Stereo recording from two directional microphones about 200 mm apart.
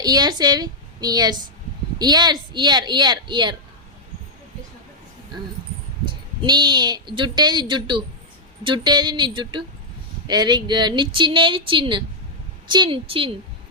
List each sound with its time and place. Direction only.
0.0 s a woman's voice: 20° right (ahead or behind)
6.1 s speech: 20° right (ahead or behind)